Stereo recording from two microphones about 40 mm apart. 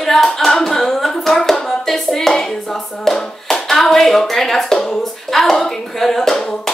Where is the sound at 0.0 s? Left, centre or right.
Centre.